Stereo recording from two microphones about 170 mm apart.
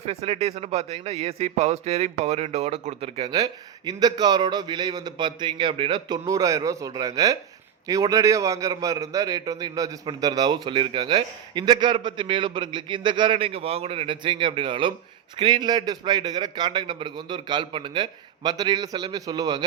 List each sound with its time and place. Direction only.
0.0 s speech: 40° right (ahead or behind)
3.2 s a man's voice: 20° right (ahead or behind)